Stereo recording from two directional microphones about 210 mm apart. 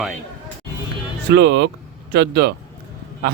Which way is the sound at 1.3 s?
55° right (ahead or behind).